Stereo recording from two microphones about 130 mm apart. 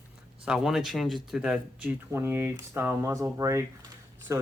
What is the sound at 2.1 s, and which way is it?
Speech, 20° right (ahead or behind).